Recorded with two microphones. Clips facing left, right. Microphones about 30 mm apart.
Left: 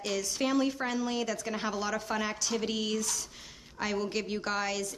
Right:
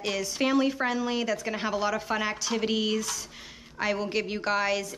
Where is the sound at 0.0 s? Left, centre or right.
Centre.